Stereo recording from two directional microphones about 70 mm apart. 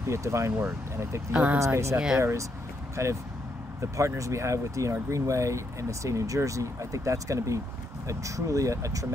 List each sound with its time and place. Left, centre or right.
0.1 s speech: right
1.3 s speech: centre
1.6 s speech: right
3.0 s speech: right